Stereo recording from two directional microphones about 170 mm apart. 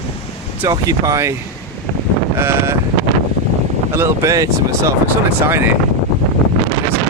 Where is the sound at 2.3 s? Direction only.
15° right (ahead or behind).